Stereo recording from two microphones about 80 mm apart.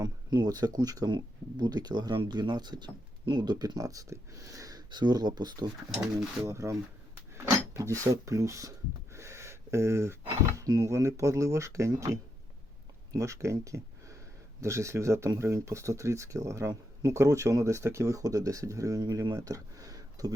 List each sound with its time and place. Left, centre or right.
0.0 s speech: right
4.9 s speech: right
6.4 s speech: right
9.1 s a sound: right
10.6 s speech: right